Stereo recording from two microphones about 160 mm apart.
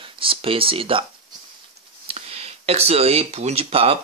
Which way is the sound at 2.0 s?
40° right (ahead or behind).